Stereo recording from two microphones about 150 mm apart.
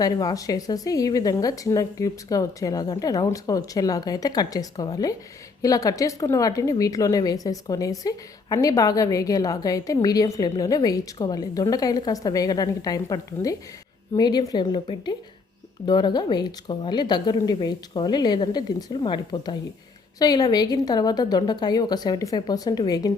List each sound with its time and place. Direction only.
0.0 s a woman's voice: 25° left (ahead or behind)